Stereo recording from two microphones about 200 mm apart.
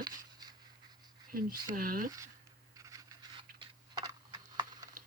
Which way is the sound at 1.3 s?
45° right (ahead or behind).